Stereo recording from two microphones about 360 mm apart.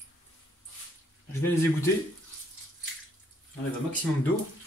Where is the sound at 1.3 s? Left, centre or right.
Centre.